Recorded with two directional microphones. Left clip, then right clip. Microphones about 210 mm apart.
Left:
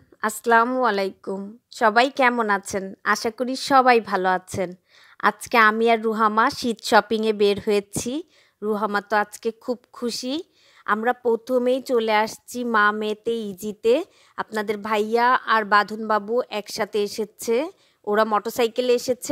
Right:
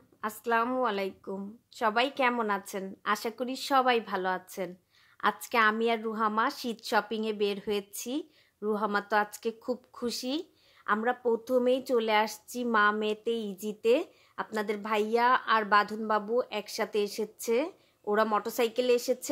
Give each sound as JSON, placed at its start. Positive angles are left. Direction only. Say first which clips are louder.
{"t": 0.2, "sound": "a woman's voice", "louder": "left 10 dB", "side_deg": 35}